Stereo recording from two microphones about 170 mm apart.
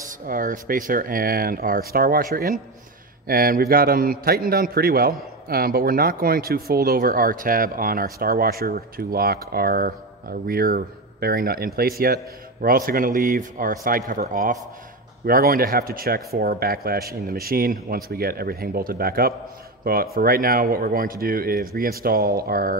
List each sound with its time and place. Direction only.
0.0 s a man's voice: 55° right (ahead or behind)